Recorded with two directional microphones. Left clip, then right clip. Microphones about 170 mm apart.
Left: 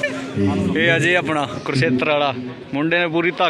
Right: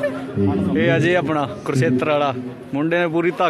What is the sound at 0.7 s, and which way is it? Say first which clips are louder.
Speech: left 1 dB; 10° right (ahead or behind).